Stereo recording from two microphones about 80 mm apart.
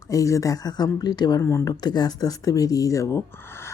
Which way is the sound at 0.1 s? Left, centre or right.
Left.